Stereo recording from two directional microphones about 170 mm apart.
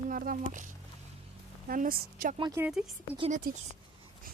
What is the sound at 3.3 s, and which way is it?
Speech, 55° right (ahead or behind).